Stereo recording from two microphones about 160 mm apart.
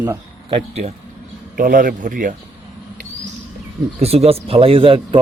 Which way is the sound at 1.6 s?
60° right (ahead or behind).